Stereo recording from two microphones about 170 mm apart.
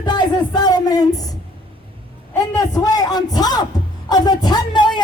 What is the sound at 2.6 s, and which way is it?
Speech, 20° left (ahead or behind).